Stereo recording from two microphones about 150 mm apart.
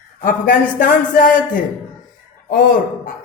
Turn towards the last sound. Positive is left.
turn(degrees=70)  # may be behind; listen again after turning